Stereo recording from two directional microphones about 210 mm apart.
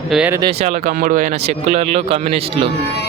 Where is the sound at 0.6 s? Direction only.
35° right (ahead or behind).